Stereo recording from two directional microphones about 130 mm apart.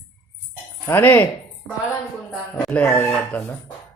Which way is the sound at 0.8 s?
15° left (ahead or behind).